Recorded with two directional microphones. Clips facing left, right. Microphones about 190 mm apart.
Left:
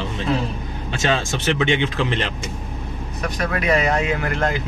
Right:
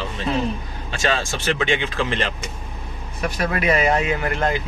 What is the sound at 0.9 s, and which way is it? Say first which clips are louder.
Speech: left 1 dB; 20° left (ahead or behind).